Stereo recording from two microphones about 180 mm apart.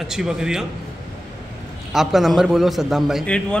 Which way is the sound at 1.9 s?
Centre (ahead or behind).